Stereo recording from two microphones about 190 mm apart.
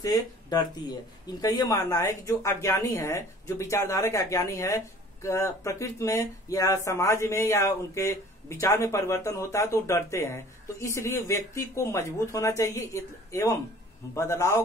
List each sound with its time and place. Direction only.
0.0 s speech: 20° left (ahead or behind)